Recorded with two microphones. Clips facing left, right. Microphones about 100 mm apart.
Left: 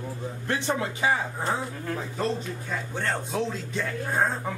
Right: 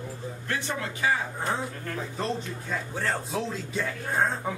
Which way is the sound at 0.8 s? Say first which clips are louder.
Left 2 dB; 20° left (ahead or behind).